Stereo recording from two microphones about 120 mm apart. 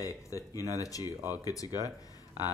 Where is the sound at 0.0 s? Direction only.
30° left (ahead or behind).